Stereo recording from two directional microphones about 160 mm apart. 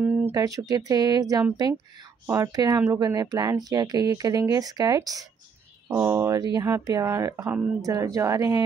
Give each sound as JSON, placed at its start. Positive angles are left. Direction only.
{"t": 0.0, "sound": "speech", "side_deg": -15}